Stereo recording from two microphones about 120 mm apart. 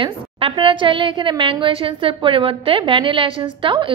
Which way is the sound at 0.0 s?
45° right (ahead or behind).